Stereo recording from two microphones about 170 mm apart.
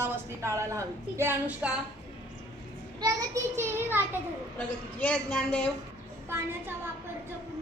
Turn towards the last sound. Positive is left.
turn(degrees=-15)  # may be behind; listen again after turning